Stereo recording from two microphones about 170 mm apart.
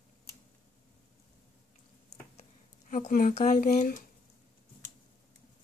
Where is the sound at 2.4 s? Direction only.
45° left (ahead or behind).